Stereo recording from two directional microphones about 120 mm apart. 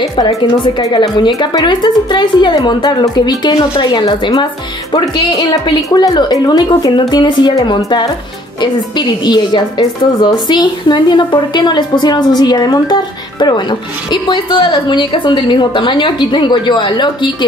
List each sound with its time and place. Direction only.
0.2 s a woman's voice: 30° left (ahead or behind)